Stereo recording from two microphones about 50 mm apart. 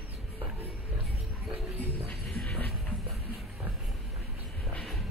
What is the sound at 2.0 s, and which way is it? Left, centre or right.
Music, centre.